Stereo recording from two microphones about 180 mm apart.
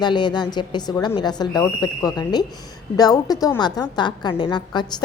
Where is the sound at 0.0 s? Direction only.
25° left (ahead or behind).